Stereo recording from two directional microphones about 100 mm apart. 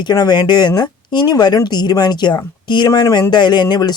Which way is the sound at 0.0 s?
45° left (ahead or behind).